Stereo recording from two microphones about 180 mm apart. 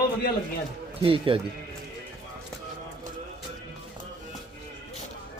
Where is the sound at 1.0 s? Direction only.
30° right (ahead or behind).